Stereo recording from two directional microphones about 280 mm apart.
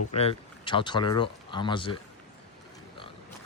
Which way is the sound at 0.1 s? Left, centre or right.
Left.